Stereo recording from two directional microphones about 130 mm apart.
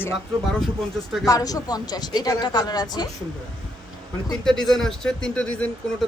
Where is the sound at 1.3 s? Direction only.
30° left (ahead or behind).